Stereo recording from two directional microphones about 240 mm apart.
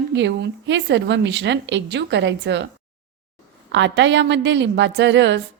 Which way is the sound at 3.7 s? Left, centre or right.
Right.